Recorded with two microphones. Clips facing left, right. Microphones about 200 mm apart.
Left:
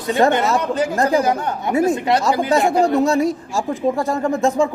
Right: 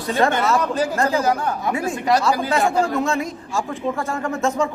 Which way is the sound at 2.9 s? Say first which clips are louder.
Left 6 dB; 40° left (ahead or behind).